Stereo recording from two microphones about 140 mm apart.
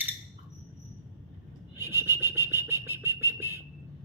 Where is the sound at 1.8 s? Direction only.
15° right (ahead or behind).